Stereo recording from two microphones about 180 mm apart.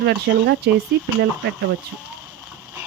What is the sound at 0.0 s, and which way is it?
Speech, 70° right (ahead or behind).